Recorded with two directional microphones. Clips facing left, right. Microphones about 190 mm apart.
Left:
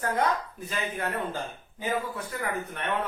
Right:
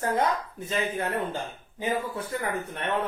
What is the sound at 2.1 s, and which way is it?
Speech, 30° right (ahead or behind).